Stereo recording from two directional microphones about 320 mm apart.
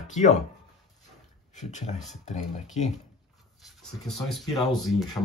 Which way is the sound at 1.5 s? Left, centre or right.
Left.